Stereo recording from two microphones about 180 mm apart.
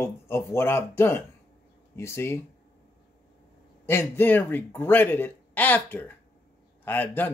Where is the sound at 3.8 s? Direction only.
10° left (ahead or behind).